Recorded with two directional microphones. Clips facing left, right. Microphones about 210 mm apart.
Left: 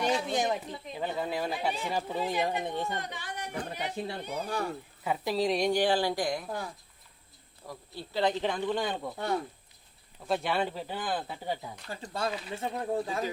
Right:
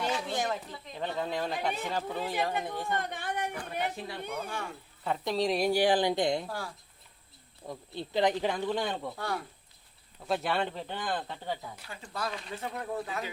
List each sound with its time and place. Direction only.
0.0 s a sound: 15° left (ahead or behind)
0.9 s speech: 5° left (ahead or behind); by 3.0 s 20° left (ahead or behind)
3.0 s a sound: 55° right (ahead or behind)
3.6 s speech: 30° left (ahead or behind)
5.0 s speech: 5° left (ahead or behind); by 6.5 s 25° right (ahead or behind)
7.7 s speech: 20° right (ahead or behind); by 9.1 s centre (ahead or behind)
9.1 s speech: 20° left (ahead or behind)
10.2 s speech: centre (ahead or behind)
11.9 s speech: 35° left (ahead or behind)
12.3 s speech: 5° left (ahead or behind)
12.5 s speech: 30° left (ahead or behind)